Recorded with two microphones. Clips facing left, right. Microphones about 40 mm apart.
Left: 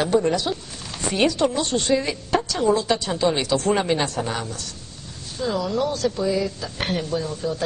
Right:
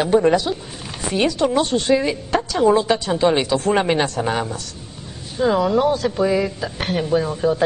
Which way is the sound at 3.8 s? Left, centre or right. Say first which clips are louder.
Right 4 dB; right.